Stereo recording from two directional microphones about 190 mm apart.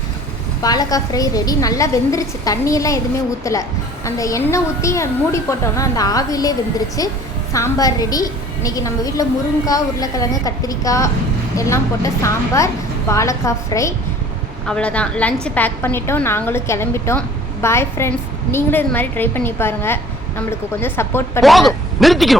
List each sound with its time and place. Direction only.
0.6 s a woman's voice: 20° left (ahead or behind)
14.7 s a woman's voice: 5° left (ahead or behind)
21.4 s speech: centre (ahead or behind)